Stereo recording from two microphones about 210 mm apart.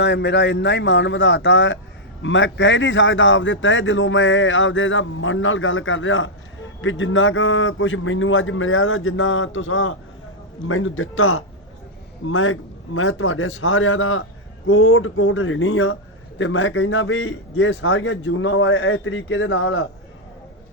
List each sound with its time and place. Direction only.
0.0 s a man's voice: 55° left (ahead or behind); by 19.9 s 70° left (ahead or behind)